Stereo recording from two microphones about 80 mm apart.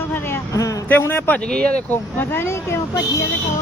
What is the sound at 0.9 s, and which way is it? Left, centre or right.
Speech, left.